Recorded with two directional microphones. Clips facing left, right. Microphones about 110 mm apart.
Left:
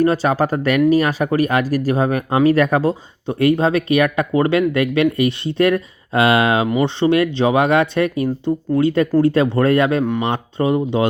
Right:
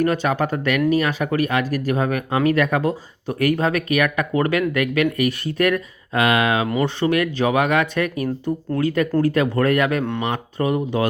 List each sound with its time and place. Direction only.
0.0 s speech: 30° left (ahead or behind)
3.2 s speech: 25° left (ahead or behind)
6.7 s speech: 20° left (ahead or behind)
10.0 s speech: 10° left (ahead or behind)
10.2 s speech: 25° left (ahead or behind)